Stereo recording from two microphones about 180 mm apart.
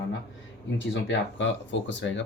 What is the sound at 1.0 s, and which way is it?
Speech, 90° left.